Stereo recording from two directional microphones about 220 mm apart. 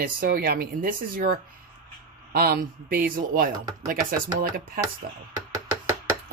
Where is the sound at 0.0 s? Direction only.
40° right (ahead or behind).